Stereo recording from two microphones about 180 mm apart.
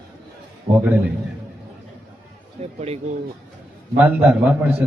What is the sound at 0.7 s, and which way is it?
Speech, 60° right (ahead or behind).